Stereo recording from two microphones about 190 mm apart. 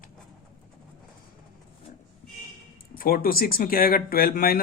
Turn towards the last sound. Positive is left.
turn(degrees=50)  # may be behind; listen again after turning